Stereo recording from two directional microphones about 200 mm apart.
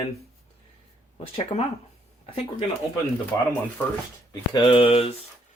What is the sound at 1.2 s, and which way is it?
Speech, 30° left (ahead or behind).